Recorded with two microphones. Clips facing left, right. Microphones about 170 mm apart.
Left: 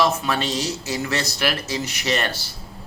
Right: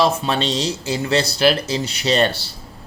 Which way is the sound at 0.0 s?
30° right (ahead or behind).